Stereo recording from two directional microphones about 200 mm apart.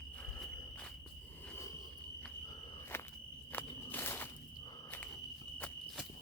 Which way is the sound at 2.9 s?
10° left (ahead or behind).